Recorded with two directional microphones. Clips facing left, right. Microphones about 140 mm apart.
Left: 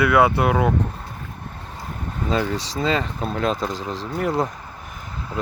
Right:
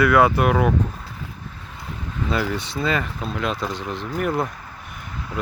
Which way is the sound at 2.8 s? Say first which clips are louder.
Left 2 dB; 25° left (ahead or behind).